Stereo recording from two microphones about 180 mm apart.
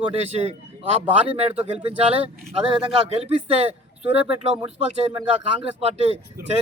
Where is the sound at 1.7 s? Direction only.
30° right (ahead or behind).